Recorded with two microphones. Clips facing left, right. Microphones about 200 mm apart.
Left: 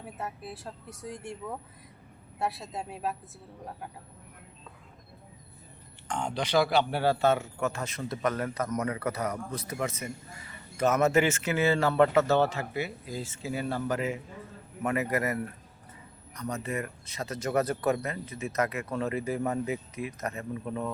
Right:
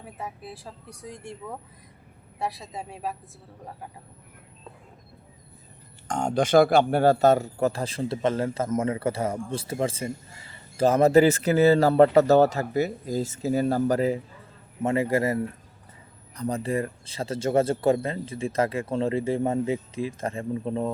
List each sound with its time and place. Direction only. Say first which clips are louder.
0.0 s speech: right 1 dB; centre (ahead or behind)
6.1 s speech: right 8 dB; 45° right (ahead or behind); by 20.9 s 30° right (ahead or behind)